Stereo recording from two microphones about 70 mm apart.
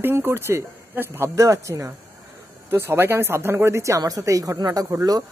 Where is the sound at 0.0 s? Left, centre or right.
Right.